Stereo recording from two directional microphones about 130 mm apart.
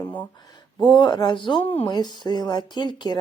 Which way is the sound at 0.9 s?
35° left (ahead or behind).